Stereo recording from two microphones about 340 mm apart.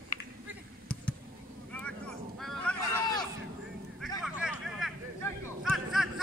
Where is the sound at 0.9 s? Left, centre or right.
Centre.